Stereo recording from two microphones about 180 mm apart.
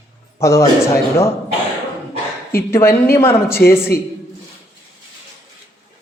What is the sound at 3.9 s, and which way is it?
Speech, 55° left (ahead or behind).